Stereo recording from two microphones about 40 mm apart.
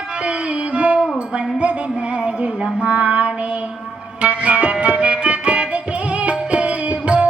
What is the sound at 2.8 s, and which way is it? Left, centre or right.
Child singing, right.